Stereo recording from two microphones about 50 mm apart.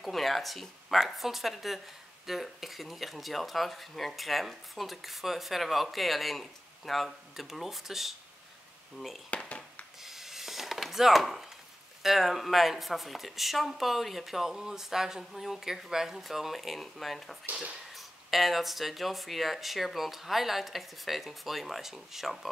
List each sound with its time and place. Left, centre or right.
0.0 s speech: centre
9.3 s speech: left
10.0 s a sound: centre
12.0 s speech: centre